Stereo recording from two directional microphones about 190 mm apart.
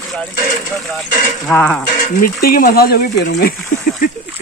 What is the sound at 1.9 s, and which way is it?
Speech, 45° left (ahead or behind).